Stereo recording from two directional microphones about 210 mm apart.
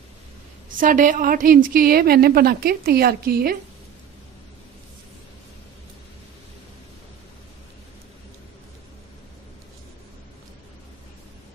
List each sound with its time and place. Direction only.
0.7 s a woman's voice: 40° right (ahead or behind)